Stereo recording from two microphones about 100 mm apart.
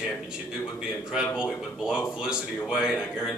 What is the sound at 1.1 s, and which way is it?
A man's voice, 5° right (ahead or behind).